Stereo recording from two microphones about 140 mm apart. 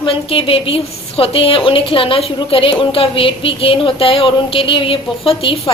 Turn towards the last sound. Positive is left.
turn(degrees=40)  # may be behind; listen again after turning